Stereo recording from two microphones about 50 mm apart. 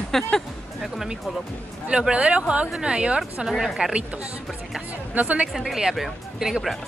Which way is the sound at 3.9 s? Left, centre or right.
Centre.